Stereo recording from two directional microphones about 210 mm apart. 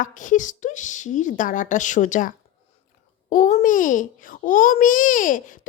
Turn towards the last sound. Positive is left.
turn(degrees=40)  # may be behind; listen again after turning